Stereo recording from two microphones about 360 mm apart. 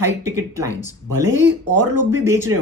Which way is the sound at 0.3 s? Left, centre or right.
Centre.